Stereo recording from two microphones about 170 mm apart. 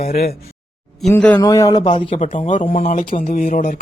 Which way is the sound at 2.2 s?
45° left (ahead or behind).